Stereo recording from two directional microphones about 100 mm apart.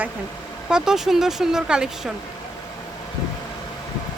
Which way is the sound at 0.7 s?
5° right (ahead or behind).